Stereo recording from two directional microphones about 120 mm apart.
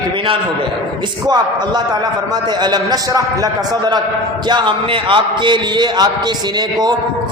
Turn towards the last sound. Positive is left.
turn(degrees=-40)  # may be behind; listen again after turning